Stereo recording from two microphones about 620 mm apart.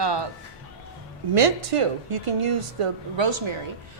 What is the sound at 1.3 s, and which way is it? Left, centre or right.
A woman's voice, right.